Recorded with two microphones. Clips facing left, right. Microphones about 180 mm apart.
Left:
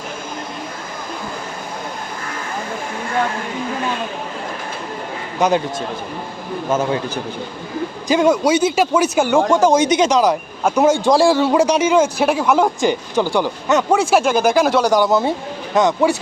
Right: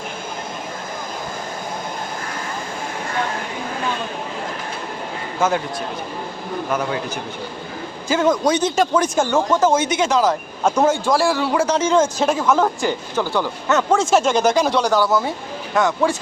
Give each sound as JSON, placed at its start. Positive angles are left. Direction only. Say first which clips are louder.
{"t": 5.4, "sound": "speech", "louder": "left 3 dB", "side_deg": 15}
{"t": 8.0, "sound": "speech", "louder": "left 2 dB", "side_deg": 15}